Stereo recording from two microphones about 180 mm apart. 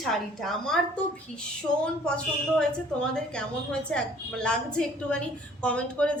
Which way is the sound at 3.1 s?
5° left (ahead or behind).